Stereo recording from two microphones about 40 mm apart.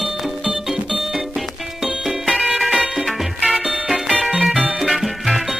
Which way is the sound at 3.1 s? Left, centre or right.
Centre.